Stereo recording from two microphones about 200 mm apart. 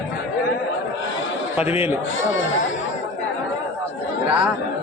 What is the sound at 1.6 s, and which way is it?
Speech, 30° left (ahead or behind).